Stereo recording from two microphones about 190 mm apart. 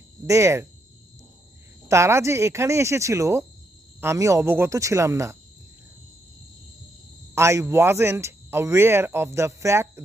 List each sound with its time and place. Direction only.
0.3 s speech: 15° right (ahead or behind)
1.9 s speech: 15° right (ahead or behind)
7.3 s speech: 15° right (ahead or behind)